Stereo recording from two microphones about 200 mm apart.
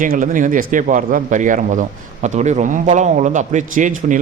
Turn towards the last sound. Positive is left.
turn(degrees=-40)  # may be behind; listen again after turning